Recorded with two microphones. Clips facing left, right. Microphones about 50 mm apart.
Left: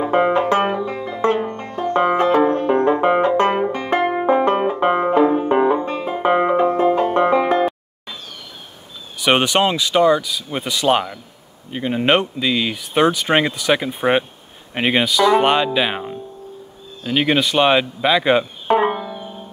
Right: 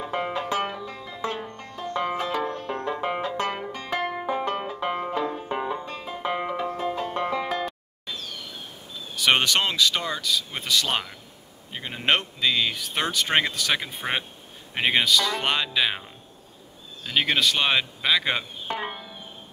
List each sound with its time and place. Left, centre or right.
0.0 s music: left
9.1 s speech: centre
18.7 s music: left